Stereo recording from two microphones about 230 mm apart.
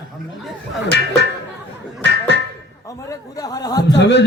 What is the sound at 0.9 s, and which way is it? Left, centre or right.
Speech, left.